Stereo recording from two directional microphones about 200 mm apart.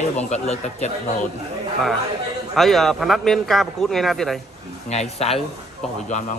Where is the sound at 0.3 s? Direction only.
35° left (ahead or behind).